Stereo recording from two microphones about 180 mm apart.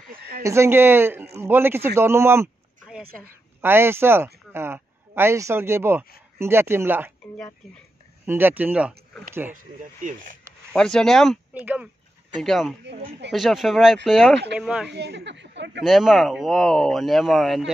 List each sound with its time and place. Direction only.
0.1 s fowl: 60° right (ahead or behind)
0.4 s speech: 15° right (ahead or behind)
8.3 s speech: 10° right (ahead or behind)
10.7 s speech: 5° left (ahead or behind)
11.6 s speech: 10° right (ahead or behind)
12.8 s speech: 75° right (ahead or behind)
13.3 s speech: centre (ahead or behind)
14.9 s speech: 70° right (ahead or behind)
15.8 s speech: centre (ahead or behind)